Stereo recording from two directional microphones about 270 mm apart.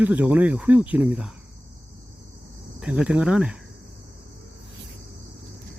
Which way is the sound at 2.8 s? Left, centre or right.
Centre.